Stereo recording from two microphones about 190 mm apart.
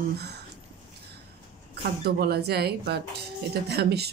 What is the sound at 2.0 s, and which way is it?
Speech, 60° right (ahead or behind).